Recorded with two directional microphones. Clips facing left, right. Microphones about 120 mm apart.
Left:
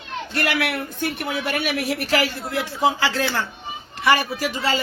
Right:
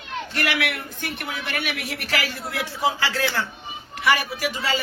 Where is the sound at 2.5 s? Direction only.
20° left (ahead or behind).